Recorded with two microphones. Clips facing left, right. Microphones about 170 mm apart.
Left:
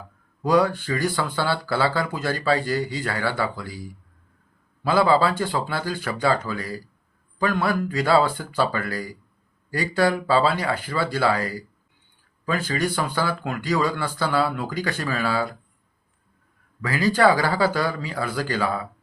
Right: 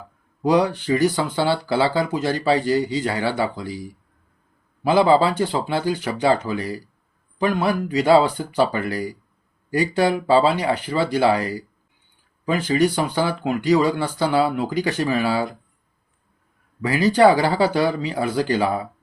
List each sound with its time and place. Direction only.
0.4 s speech: 20° right (ahead or behind)
16.8 s speech: 20° right (ahead or behind)